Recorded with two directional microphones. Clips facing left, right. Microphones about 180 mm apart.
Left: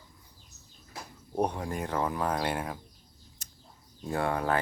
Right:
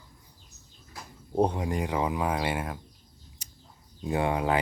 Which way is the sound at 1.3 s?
20° right (ahead or behind).